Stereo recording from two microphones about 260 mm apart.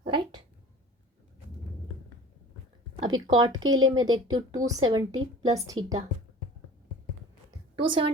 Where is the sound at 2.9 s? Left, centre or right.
Centre.